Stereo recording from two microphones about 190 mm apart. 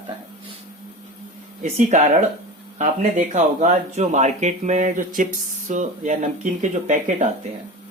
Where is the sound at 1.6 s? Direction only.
40° right (ahead or behind).